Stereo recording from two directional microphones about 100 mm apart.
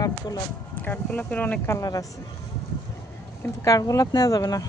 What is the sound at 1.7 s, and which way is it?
Speech, 35° left (ahead or behind).